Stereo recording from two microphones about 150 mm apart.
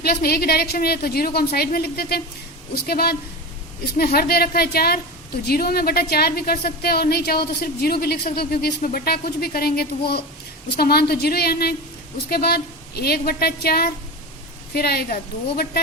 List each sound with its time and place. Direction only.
0.0 s a woman's voice: 90° left